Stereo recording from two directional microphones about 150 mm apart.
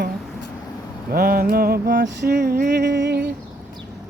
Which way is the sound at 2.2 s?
90° right.